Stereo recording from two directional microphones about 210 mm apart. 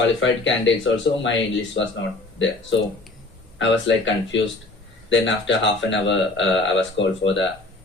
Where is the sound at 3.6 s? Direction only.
60° left (ahead or behind).